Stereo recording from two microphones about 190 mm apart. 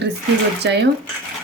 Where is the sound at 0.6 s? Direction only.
65° right (ahead or behind).